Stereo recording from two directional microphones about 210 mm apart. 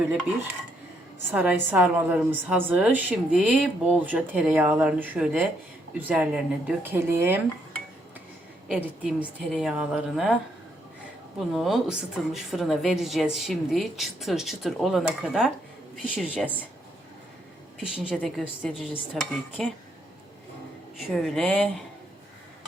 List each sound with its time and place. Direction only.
1.3 s a woman's voice: 10° right (ahead or behind)
8.6 s a woman's voice: 5° right (ahead or behind)
11.3 s a woman's voice: centre (ahead or behind)
17.7 s a woman's voice: 5° right (ahead or behind)
21.0 s a woman's voice: centre (ahead or behind)